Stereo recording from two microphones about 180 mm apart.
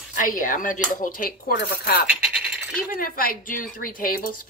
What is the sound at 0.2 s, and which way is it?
Speech, 45° left (ahead or behind).